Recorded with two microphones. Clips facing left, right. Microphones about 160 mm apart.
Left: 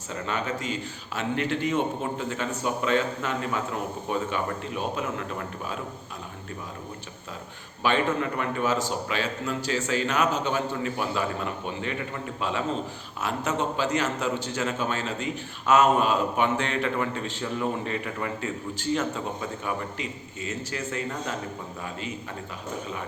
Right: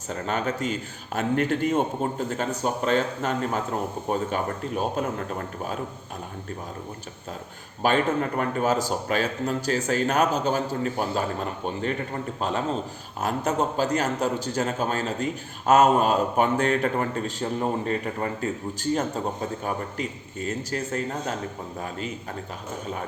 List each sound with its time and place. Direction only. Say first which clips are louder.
0.1 s a man's voice: right 3 dB; 40° right (ahead or behind)
7.8 s a man's voice: right 2 dB; 45° right (ahead or behind)